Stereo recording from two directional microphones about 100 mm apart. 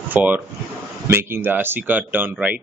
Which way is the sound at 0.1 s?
15° right (ahead or behind).